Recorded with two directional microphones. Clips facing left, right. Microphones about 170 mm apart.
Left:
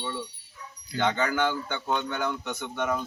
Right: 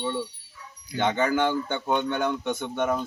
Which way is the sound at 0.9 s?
20° right (ahead or behind).